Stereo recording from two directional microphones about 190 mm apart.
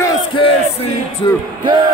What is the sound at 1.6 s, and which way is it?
Speech, 25° right (ahead or behind).